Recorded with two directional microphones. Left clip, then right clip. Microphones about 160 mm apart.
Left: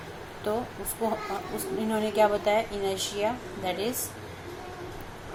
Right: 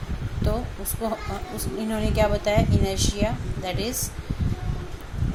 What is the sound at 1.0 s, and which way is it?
Speech, 20° right (ahead or behind).